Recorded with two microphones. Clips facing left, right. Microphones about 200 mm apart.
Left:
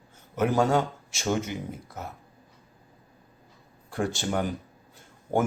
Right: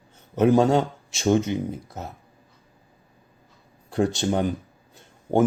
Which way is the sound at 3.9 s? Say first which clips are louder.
Right 6 dB; 20° right (ahead or behind).